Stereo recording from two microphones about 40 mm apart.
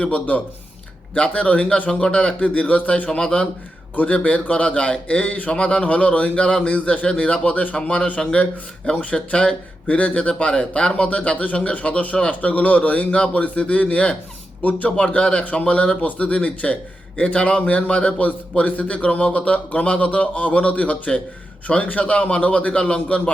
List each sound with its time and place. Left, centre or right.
0.0 s a man's voice: left
3.9 s a man's voice: left
7.8 s speech: left
9.1 s speech: left
9.9 s a man's voice: left